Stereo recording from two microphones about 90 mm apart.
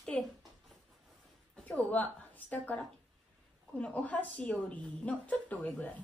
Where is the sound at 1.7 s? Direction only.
20° left (ahead or behind).